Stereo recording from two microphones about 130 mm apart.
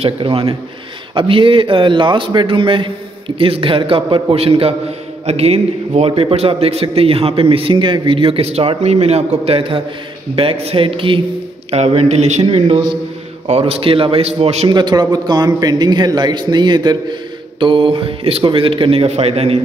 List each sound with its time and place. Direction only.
0.0 s a man's voice: 45° right (ahead or behind)
11.7 s a man's voice: 55° right (ahead or behind)
14.7 s a man's voice: 35° right (ahead or behind); by 19.6 s 50° right (ahead or behind)